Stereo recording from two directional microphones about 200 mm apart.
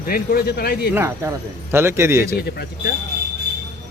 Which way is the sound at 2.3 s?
50° left (ahead or behind).